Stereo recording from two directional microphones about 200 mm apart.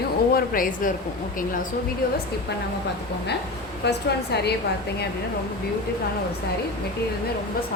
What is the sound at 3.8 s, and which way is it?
Speech, 55° left (ahead or behind).